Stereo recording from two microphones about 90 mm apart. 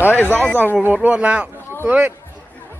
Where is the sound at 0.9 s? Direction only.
15° right (ahead or behind).